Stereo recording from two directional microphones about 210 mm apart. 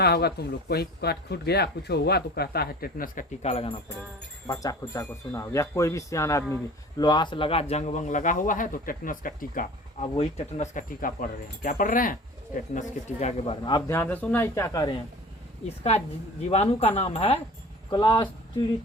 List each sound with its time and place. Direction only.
0.0 s speech: 50° left (ahead or behind); by 3.8 s 30° left (ahead or behind)
4.4 s speech: 15° left (ahead or behind)
16.5 s speech: 30° left (ahead or behind)